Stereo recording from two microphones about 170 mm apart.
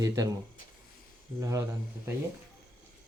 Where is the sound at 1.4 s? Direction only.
20° right (ahead or behind).